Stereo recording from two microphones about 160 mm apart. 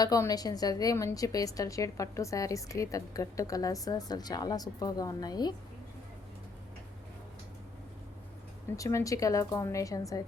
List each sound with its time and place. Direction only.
0.0 s a woman's voice: 20° left (ahead or behind)
8.7 s a woman's voice: 20° left (ahead or behind)